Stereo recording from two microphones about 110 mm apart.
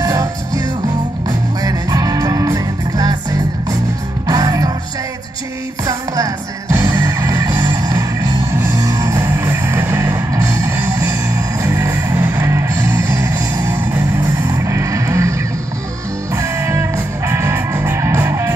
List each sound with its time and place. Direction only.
0.0 s music: 35° right (ahead or behind)
5.9 s music: 30° right (ahead or behind)